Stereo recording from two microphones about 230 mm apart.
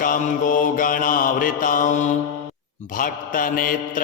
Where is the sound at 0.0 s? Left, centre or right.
Left.